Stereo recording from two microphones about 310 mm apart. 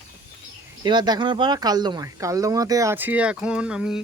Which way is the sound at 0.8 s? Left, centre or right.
Centre.